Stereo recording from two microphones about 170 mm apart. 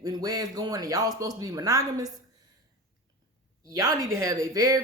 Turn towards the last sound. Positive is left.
turn(degrees=-20)  # may be behind; listen again after turning